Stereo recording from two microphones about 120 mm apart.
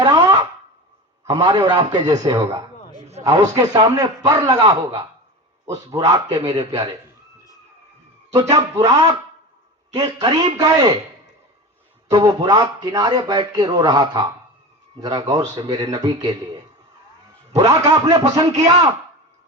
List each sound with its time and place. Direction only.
0.0 s a sound: 35° right (ahead or behind)
1.3 s speech: 35° right (ahead or behind)
8.4 s speech: 35° right (ahead or behind)
12.1 s speech: 35° right (ahead or behind)